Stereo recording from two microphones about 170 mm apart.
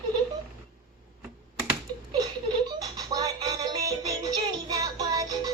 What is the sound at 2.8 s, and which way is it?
Music, 20° right (ahead or behind).